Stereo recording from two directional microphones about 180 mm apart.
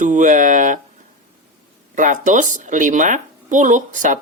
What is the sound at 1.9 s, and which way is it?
A woman's voice, 45° right (ahead or behind).